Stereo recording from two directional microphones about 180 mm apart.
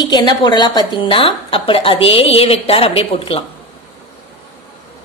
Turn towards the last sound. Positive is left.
turn(degrees=30)  # may be behind; listen again after turning